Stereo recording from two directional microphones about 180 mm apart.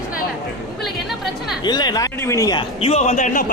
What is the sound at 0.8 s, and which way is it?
Music, centre (ahead or behind).